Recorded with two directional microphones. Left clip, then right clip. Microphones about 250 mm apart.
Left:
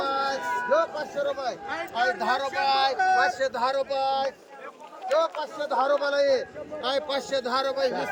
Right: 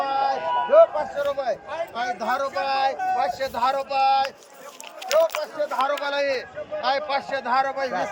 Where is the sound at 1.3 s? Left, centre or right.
Centre.